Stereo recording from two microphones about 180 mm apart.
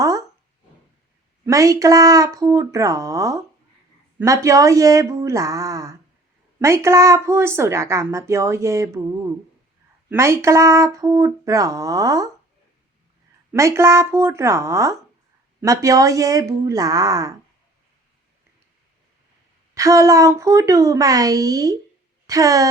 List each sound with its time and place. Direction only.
0.0 s a sound: 20° right (ahead or behind)
1.5 s speech: 20° right (ahead or behind)
10.1 s speech: 15° right (ahead or behind)
13.5 s speech: 15° right (ahead or behind)
19.7 s speech: 20° right (ahead or behind)